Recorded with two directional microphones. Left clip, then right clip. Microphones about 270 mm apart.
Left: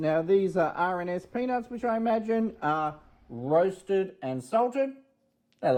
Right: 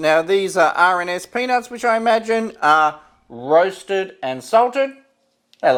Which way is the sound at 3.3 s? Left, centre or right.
Right.